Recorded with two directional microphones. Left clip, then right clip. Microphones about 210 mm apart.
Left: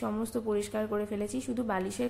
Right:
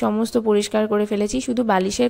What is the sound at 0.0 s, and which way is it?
A woman's voice, 40° right (ahead or behind).